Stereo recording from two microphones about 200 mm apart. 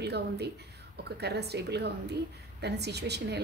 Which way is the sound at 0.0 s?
55° right (ahead or behind).